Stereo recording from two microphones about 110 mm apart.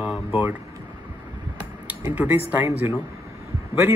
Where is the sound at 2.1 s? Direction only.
15° right (ahead or behind).